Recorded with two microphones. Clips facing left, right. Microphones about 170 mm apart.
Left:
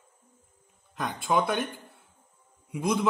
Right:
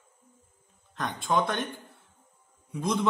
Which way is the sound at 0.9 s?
5° left (ahead or behind).